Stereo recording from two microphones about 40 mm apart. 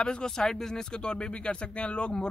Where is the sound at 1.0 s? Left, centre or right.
Left.